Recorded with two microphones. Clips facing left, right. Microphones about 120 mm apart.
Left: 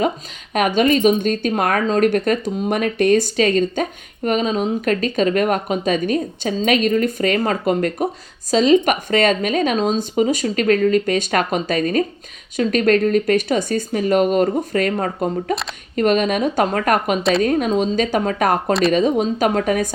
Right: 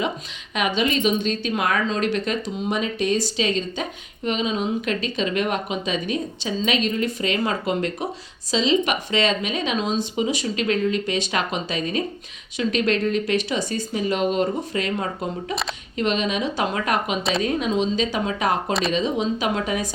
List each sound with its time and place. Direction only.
0.5 s a woman's voice: 50° left (ahead or behind)